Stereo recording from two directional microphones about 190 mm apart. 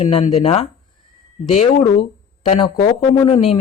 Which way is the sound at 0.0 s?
35° left (ahead or behind).